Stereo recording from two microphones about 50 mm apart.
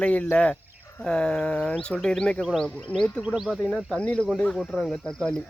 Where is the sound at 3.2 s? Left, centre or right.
Centre.